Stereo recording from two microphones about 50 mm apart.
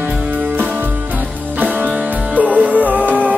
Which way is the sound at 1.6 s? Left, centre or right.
Right.